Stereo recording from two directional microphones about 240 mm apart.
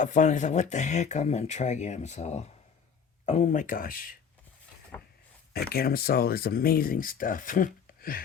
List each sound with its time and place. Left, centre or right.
0.0 s speech: left
5.5 s speech: left